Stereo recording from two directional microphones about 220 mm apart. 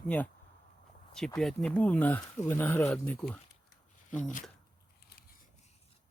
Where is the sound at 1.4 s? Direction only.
Centre (ahead or behind).